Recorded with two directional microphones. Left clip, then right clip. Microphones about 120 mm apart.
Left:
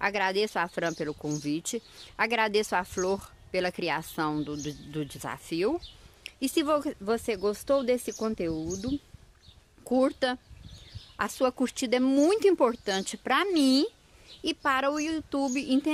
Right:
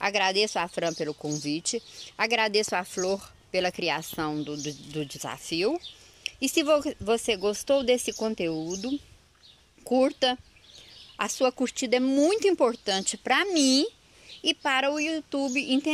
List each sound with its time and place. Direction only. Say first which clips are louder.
0.0 s speech: right 2 dB; 5° left (ahead or behind); by 8.6 s 10° right (ahead or behind)
9.8 s speech: right 3 dB; 5° left (ahead or behind)